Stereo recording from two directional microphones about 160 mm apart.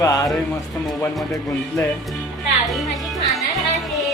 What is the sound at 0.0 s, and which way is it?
Music, 20° left (ahead or behind).